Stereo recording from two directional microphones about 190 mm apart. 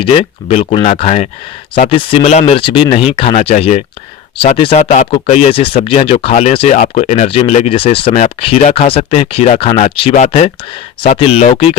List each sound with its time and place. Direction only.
0.0 s speech: 30° left (ahead or behind)